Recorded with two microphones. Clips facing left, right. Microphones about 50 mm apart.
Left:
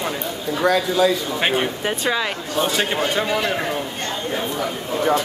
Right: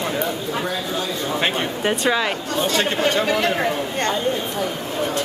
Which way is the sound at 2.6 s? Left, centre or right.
Centre.